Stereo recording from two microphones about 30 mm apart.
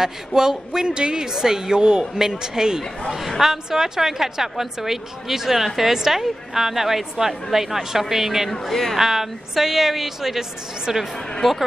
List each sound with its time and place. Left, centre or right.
0.0 s speech: centre
3.1 s a woman's voice: centre
8.5 s speech: centre
8.9 s a woman's voice: centre
11.4 s a woman's voice: centre